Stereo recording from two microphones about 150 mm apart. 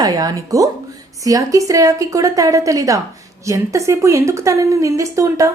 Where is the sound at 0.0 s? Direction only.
25° right (ahead or behind).